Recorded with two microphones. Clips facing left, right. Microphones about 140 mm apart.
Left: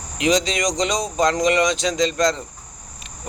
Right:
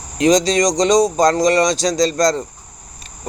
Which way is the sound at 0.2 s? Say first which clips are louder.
Right 6 dB; 40° right (ahead or behind).